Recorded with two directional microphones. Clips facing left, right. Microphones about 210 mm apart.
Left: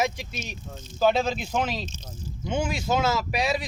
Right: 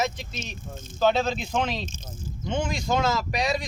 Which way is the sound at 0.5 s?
50° right (ahead or behind).